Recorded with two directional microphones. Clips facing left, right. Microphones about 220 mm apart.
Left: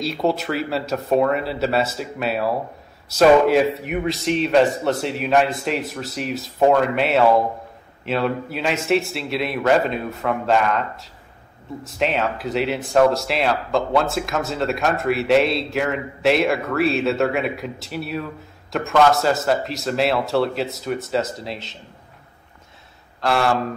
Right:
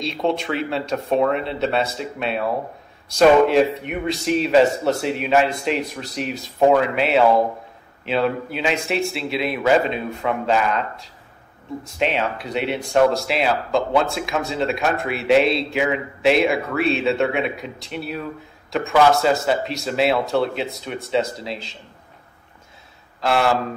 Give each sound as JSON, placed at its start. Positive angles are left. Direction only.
{"t": 0.0, "sound": "speech", "side_deg": 5}
{"t": 23.2, "sound": "speech", "side_deg": 0}